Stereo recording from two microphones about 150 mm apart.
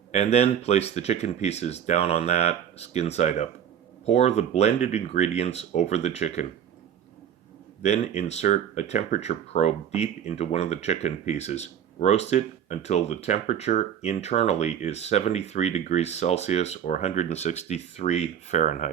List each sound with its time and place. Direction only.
0.1 s speech: 45° left (ahead or behind)
7.8 s speech: 50° left (ahead or behind)